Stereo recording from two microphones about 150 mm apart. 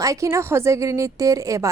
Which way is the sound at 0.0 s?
20° right (ahead or behind).